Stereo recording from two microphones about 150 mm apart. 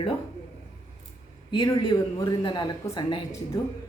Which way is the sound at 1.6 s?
30° left (ahead or behind).